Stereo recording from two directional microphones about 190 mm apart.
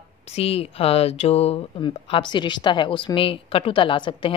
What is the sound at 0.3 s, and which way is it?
Speech, 30° left (ahead or behind).